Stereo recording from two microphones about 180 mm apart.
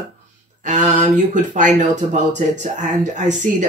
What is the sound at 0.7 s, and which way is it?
A man's voice, 40° right (ahead or behind).